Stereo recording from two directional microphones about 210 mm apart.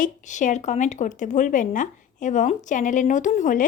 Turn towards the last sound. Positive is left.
turn(degrees=35)  # may be behind; listen again after turning